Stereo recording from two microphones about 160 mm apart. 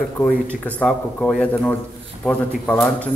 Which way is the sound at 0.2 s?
10° left (ahead or behind).